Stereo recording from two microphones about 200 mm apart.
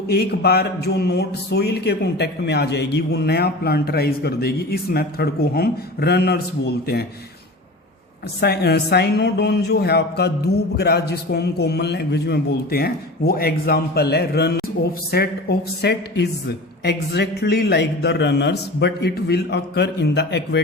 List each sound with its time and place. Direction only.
0.1 s a man's voice: 50° left (ahead or behind)
8.4 s a man's voice: 55° left (ahead or behind)